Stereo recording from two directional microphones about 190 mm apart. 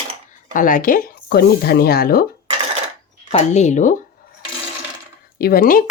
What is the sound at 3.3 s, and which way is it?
Speech, 35° left (ahead or behind).